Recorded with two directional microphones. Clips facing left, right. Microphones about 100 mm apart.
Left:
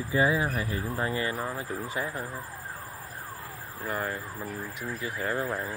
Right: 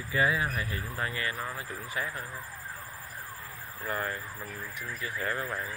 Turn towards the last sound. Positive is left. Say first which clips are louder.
# left 3 dB
turn(degrees=20)  # may be behind; listen again after turning